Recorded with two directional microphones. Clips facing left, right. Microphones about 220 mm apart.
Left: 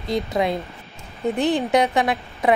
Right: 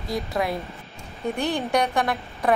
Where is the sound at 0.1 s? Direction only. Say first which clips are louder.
Left 4 dB; 20° left (ahead or behind).